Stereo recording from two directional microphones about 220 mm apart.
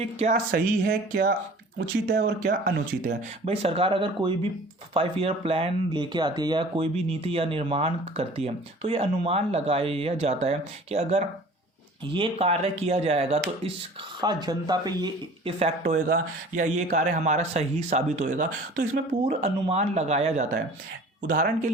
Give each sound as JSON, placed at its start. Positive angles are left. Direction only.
{"t": 0.0, "sound": "speech", "side_deg": -30}
{"t": 15.8, "sound": "speech", "side_deg": -40}